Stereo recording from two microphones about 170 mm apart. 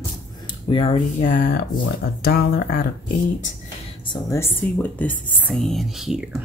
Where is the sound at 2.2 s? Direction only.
65° left (ahead or behind).